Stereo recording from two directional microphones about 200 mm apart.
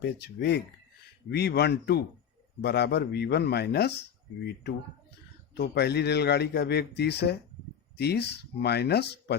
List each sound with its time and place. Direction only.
0.0 s speech: 55° left (ahead or behind)
5.5 s speech: 55° left (ahead or behind)